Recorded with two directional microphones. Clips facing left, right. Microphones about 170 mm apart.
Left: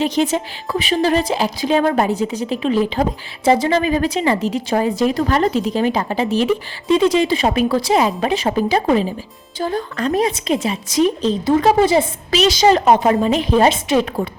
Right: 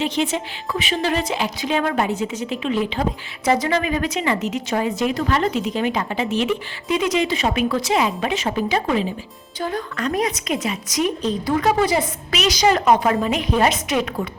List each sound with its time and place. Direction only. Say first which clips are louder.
0.0 s a woman's voice: left 4 dB; 40° left (ahead or behind)